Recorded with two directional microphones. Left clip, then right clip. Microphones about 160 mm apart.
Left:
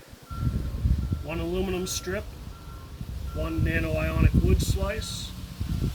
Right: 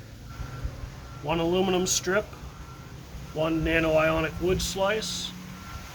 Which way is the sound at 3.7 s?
25° left (ahead or behind).